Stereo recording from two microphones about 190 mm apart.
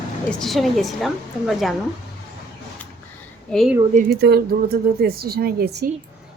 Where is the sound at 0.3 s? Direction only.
Centre (ahead or behind).